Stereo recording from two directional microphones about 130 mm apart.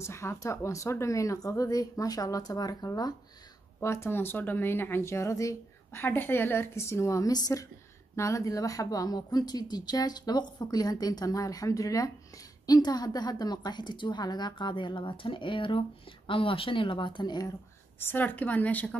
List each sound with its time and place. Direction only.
0.0 s speech: 20° left (ahead or behind)
3.8 s a woman's voice: 20° left (ahead or behind)
17.9 s a woman's voice: 15° left (ahead or behind)